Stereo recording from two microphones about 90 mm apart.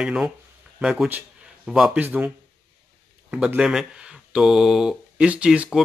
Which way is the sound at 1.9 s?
20° right (ahead or behind).